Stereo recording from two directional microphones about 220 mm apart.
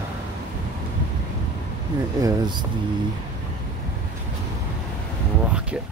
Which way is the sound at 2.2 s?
20° right (ahead or behind).